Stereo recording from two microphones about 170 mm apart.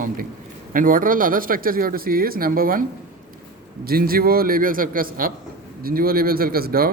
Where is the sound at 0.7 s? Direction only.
55° right (ahead or behind).